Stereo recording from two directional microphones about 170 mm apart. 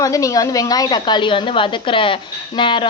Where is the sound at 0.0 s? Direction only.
20° left (ahead or behind).